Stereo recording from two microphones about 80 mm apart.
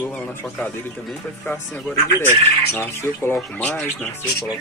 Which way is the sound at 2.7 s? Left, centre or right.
Left.